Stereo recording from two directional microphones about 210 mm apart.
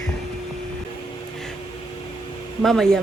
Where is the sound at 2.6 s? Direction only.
Centre (ahead or behind).